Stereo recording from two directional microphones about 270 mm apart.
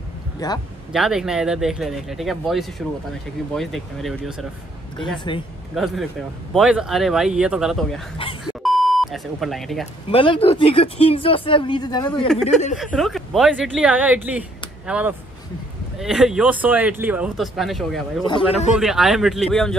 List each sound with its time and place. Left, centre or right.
0.4 s a man's voice: centre
0.9 s speech: centre
5.3 s a man's voice: centre
6.5 s speech: centre
8.6 s beep: centre
10.0 s speech: centre
12.7 s speech: centre
18.2 s a man's voice: centre
18.8 s speech: centre